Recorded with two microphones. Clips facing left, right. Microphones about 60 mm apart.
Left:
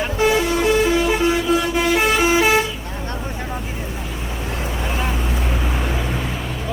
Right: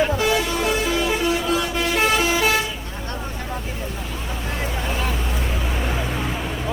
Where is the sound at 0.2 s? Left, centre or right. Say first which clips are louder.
Left 4 dB; left.